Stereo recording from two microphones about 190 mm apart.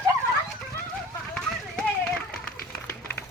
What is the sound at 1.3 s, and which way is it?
Run, 5° left (ahead or behind).